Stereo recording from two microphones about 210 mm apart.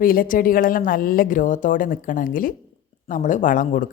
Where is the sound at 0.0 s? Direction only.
40° left (ahead or behind).